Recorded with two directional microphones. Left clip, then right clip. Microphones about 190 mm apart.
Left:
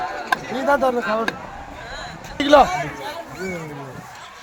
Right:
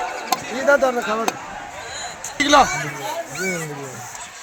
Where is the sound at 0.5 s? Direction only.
60° left (ahead or behind).